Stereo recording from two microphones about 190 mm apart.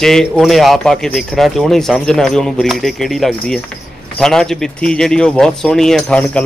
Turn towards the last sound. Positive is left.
turn(degrees=5)  # may be behind; listen again after turning